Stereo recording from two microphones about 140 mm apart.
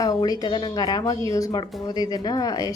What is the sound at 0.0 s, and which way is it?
A woman's voice, 25° left (ahead or behind).